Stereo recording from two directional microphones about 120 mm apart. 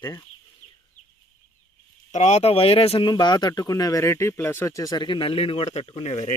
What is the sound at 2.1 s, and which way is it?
Speech, 70° left (ahead or behind).